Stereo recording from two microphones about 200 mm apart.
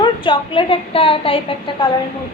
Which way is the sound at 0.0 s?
25° left (ahead or behind).